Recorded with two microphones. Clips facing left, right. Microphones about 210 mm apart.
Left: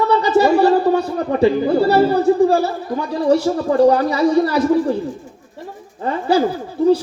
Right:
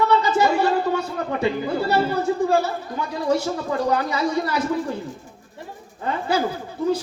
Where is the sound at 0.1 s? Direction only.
35° left (ahead or behind).